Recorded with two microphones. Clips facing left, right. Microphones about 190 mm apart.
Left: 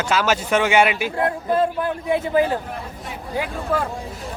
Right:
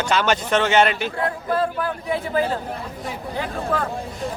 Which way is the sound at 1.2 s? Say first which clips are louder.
Left 4 dB; 20° left (ahead or behind).